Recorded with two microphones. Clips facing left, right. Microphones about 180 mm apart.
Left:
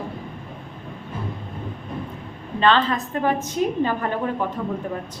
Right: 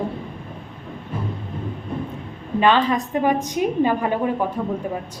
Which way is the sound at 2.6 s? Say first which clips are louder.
Right 2 dB; 15° right (ahead or behind).